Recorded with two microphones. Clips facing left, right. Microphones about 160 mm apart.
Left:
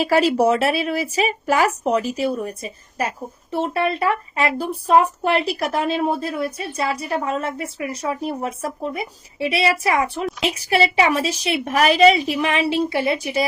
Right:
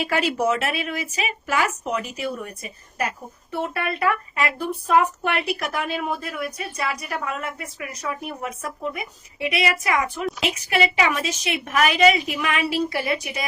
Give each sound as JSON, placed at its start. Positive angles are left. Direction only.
{"t": 0.0, "sound": "speech", "side_deg": 35}